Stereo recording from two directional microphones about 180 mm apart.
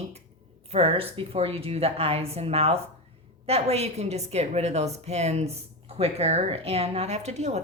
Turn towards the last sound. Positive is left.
turn(degrees=-40)  # may be behind; listen again after turning